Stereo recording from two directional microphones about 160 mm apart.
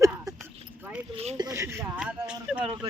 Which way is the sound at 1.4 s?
20° right (ahead or behind).